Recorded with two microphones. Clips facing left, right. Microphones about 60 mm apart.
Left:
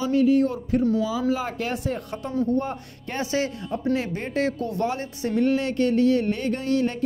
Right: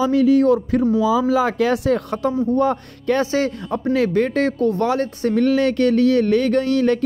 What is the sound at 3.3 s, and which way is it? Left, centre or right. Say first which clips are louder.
Speech: right 5 dB; right.